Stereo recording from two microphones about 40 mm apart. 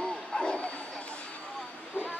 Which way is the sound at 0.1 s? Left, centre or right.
Left.